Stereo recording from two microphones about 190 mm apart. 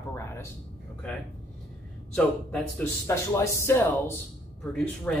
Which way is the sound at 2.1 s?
5° left (ahead or behind).